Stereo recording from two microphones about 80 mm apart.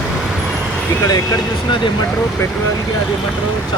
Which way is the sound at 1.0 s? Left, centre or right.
Left.